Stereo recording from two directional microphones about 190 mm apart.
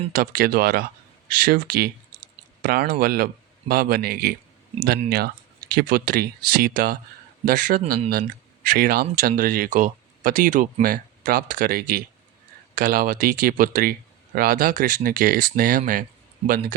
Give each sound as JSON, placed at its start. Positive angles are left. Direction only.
{"t": 0.1, "sound": "speech", "side_deg": -50}